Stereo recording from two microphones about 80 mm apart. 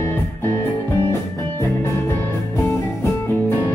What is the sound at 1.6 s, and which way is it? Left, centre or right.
Music, left.